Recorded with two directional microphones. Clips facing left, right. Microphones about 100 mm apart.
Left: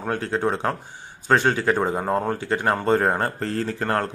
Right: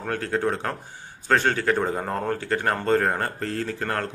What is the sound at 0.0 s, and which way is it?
Speech, 25° left (ahead or behind).